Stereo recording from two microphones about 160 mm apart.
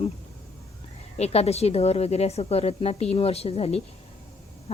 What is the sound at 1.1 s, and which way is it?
A woman's voice, 40° left (ahead or behind).